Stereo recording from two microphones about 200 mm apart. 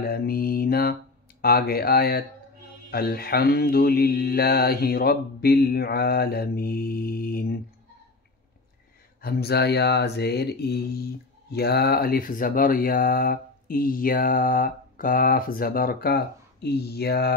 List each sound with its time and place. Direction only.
0.0 s speech: 50° left (ahead or behind)
9.2 s speech: 50° left (ahead or behind)